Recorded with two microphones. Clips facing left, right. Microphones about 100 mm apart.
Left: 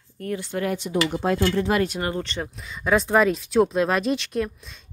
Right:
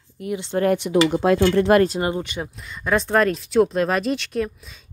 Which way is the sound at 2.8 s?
Centre (ahead or behind).